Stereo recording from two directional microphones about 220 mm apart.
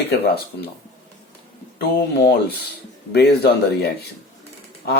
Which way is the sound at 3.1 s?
50° left (ahead or behind).